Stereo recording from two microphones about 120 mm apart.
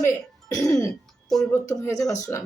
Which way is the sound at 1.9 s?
30° left (ahead or behind).